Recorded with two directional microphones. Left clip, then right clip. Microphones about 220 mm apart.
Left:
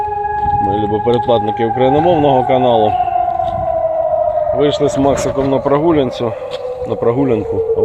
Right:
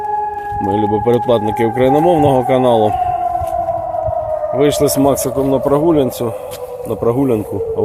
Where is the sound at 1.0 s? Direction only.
20° right (ahead or behind).